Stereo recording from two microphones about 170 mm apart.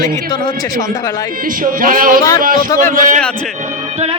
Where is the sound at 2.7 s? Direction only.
15° left (ahead or behind).